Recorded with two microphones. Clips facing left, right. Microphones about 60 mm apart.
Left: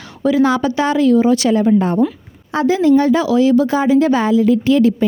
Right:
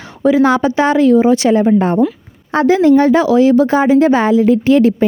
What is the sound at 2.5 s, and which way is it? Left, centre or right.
A woman's voice, right.